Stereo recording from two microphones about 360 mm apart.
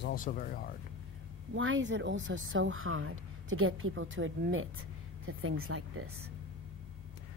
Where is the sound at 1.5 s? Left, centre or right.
Right.